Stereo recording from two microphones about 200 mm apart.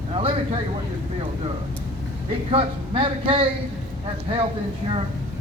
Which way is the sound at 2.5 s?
25° right (ahead or behind).